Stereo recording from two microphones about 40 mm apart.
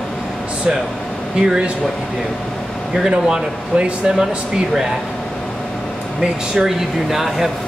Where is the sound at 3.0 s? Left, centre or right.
Centre.